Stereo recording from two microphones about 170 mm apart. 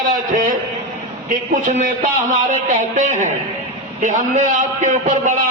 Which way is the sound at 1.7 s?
50° right (ahead or behind).